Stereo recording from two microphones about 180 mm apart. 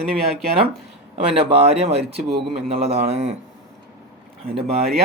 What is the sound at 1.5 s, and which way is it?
A man's voice, 35° right (ahead or behind).